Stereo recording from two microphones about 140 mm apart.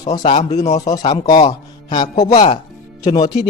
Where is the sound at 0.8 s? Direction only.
30° left (ahead or behind).